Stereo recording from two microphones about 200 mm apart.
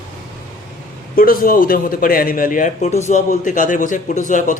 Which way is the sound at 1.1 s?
45° left (ahead or behind).